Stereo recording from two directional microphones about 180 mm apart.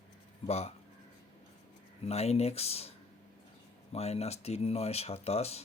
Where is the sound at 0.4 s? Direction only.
35° left (ahead or behind).